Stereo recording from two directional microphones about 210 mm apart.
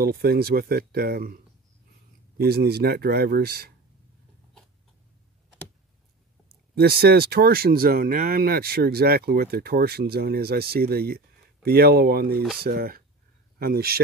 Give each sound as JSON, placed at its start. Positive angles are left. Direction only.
{"t": 0.0, "sound": "speech", "side_deg": -45}
{"t": 6.7, "sound": "speech", "side_deg": -45}